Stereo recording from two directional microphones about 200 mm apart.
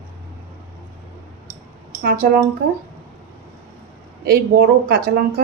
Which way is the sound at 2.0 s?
45° right (ahead or behind).